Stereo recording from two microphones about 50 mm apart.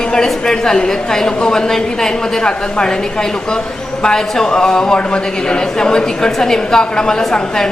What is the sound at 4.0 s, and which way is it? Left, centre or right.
Speech, centre.